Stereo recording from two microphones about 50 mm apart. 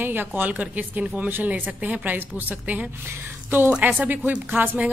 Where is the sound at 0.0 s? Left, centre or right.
Right.